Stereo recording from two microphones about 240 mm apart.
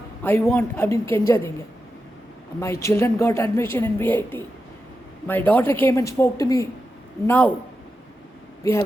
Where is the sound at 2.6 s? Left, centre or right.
Centre.